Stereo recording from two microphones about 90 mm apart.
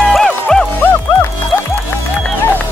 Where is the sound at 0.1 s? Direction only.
5° left (ahead or behind).